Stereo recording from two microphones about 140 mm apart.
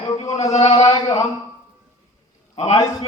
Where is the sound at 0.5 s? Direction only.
50° left (ahead or behind).